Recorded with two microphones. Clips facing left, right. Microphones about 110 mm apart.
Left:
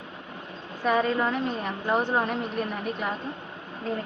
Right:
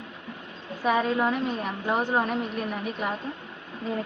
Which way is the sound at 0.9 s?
5° right (ahead or behind).